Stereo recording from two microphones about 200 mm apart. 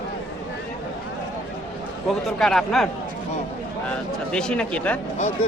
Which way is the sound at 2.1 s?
Centre (ahead or behind).